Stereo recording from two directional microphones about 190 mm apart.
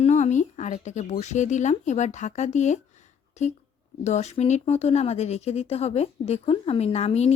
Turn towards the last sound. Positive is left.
turn(degrees=35)  # may be behind; listen again after turning